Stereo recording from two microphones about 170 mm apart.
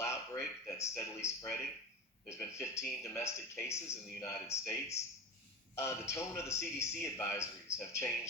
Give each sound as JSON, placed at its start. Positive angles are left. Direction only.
{"t": 0.0, "sound": "a sound", "side_deg": 15}
{"t": 2.2, "sound": "speech", "side_deg": 15}
{"t": 5.7, "sound": "speech", "side_deg": 15}